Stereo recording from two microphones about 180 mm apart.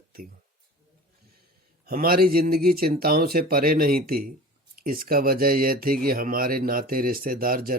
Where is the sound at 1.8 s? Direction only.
55° right (ahead or behind).